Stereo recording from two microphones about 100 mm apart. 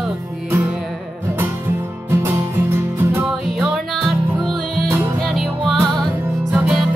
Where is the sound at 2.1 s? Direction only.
25° right (ahead or behind).